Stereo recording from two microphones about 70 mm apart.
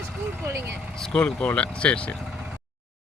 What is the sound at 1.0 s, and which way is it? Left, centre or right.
Speech, centre.